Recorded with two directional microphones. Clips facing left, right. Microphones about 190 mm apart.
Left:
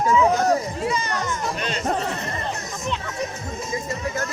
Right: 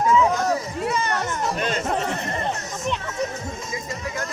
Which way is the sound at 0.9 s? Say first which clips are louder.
Right 3 dB; 60° right (ahead or behind).